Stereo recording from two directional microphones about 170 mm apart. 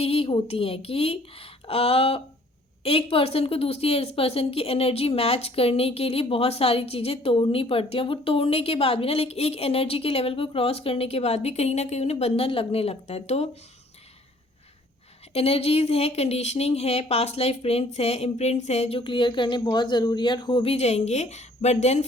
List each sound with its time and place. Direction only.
0.0 s a woman's voice: 35° left (ahead or behind)
15.3 s a woman's voice: 35° left (ahead or behind)